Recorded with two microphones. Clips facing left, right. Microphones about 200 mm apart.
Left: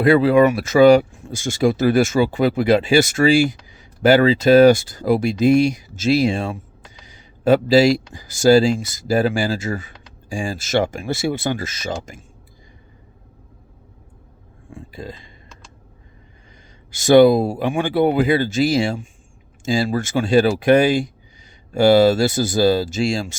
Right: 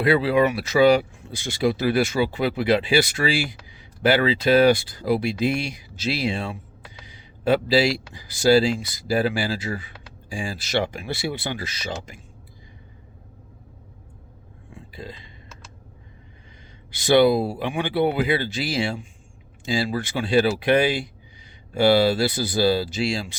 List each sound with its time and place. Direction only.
0.0 s speech: 45° left (ahead or behind)
7.0 s a sound: 45° left (ahead or behind)
8.1 s speech: 45° left (ahead or behind)
14.7 s burping: 45° left (ahead or behind)
16.9 s speech: 45° left (ahead or behind)